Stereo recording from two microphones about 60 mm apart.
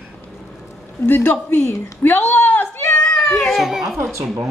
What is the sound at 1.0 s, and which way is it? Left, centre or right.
Speech, left.